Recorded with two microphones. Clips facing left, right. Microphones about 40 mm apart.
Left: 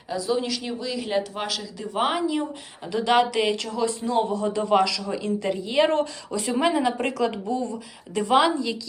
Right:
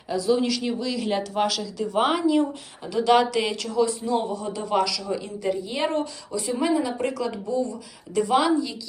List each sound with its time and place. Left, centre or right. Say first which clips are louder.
0.1 s speech: right 3 dB; centre
2.8 s speech: right 1 dB; left